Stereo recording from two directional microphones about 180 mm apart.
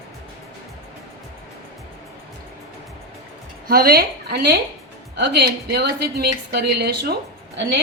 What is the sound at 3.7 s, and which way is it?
A woman's voice, 55° right (ahead or behind).